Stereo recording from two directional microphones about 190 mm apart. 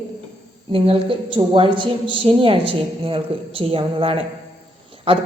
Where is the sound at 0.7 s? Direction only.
30° right (ahead or behind).